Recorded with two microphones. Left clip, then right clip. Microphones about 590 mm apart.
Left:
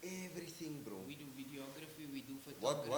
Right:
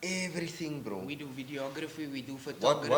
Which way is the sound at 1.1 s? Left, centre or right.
Right.